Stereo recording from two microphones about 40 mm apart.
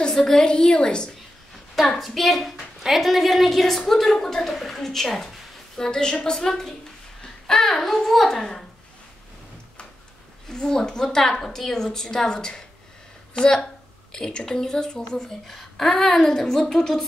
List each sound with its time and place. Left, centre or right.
0.1 s a woman's voice: centre
0.4 s a woman's voice: left
1.8 s a woman's voice: centre
2.5 s a sound: centre
3.0 s a woman's voice: centre
5.8 s a woman's voice: centre
10.5 s a woman's voice: centre